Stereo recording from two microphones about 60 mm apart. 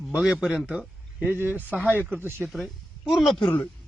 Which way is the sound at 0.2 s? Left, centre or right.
Centre.